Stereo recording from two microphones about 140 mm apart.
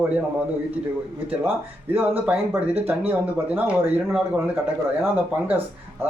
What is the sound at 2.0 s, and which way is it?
Speech, 15° right (ahead or behind).